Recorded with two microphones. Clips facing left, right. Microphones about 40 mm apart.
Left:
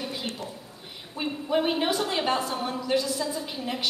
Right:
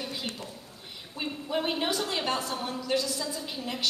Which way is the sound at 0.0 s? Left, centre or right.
Centre.